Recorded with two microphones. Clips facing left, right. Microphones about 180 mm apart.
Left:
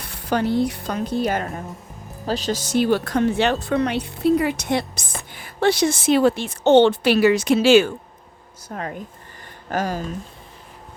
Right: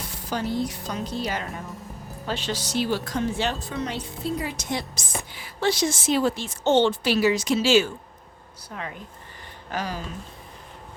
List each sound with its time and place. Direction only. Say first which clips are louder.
0.0 s a woman's voice: left 7 dB; 60° left (ahead or behind)
2.2 s a woman's voice: left 6 dB; 40° left (ahead or behind); by 7.9 s 60° left (ahead or behind)
8.7 s speech: left 6 dB; 45° left (ahead or behind)